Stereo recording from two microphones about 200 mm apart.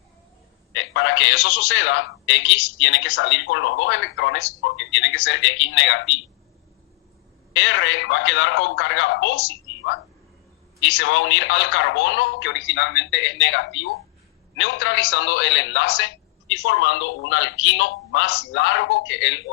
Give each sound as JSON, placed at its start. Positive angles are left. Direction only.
{"t": 0.7, "sound": "a man's voice", "side_deg": 65}
{"t": 7.5, "sound": "a man's voice", "side_deg": 70}
{"t": 10.8, "sound": "a man's voice", "side_deg": 70}